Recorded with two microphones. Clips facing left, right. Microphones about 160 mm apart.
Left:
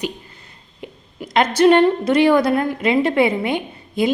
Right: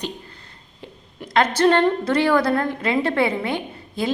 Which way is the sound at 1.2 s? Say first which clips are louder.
Left 4 dB; 5° left (ahead or behind).